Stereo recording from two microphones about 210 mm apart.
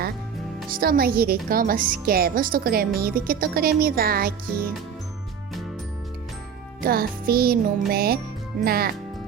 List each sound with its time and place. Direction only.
0.7 s a woman's voice: 45° right (ahead or behind)
6.8 s a woman's voice: 45° right (ahead or behind)